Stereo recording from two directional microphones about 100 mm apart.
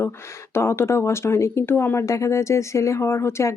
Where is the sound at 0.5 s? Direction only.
25° left (ahead or behind).